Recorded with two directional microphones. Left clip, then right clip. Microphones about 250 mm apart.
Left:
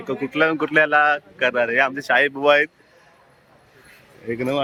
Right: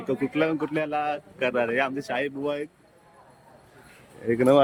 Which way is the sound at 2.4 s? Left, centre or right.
Left.